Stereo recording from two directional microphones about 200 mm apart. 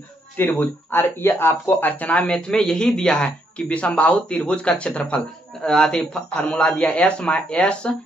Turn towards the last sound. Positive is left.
turn(degrees=5)  # may be behind; listen again after turning